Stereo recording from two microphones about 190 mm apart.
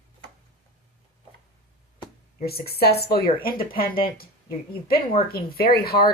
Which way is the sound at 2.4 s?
55° left (ahead or behind).